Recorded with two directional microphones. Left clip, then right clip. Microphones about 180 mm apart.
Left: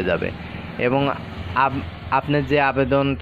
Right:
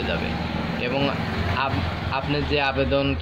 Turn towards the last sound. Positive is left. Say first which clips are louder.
# left 3 dB
turn(degrees=40)  # may be behind; listen again after turning